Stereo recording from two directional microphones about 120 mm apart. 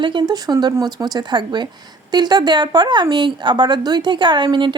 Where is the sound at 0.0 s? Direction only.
40° right (ahead or behind).